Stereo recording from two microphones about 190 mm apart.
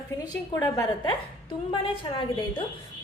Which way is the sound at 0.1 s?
20° left (ahead or behind).